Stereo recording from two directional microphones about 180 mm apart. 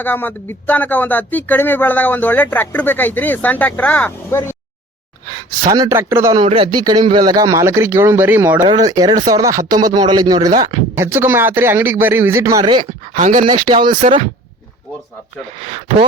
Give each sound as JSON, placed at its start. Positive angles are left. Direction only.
{"t": 0.0, "sound": "speech", "side_deg": 10}
{"t": 5.7, "sound": "a man's voice", "side_deg": -20}
{"t": 6.4, "sound": "speech", "side_deg": -40}
{"t": 6.7, "sound": "a man's voice", "side_deg": -25}
{"t": 8.6, "sound": "a man's voice", "side_deg": -25}
{"t": 13.1, "sound": "speech", "side_deg": -45}
{"t": 13.4, "sound": "speech", "side_deg": -25}
{"t": 13.9, "sound": "speech", "side_deg": -45}
{"t": 15.6, "sound": "speech", "side_deg": -40}